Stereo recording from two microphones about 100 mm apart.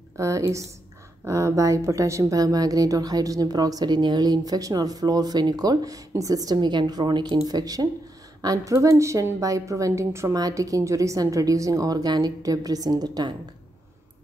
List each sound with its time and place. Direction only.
0.2 s a woman's voice: 30° right (ahead or behind)